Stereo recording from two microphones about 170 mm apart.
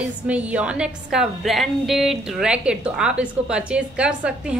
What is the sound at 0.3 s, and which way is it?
A woman's voice, 5° right (ahead or behind).